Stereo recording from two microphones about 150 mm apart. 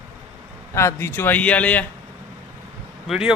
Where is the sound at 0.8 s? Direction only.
15° left (ahead or behind).